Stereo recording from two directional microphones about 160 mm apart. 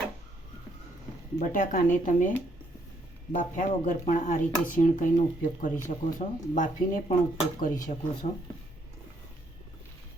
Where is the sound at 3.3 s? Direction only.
55° left (ahead or behind).